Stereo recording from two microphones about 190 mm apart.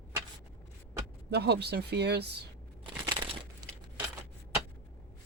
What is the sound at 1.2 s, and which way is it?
Speech, 60° right (ahead or behind).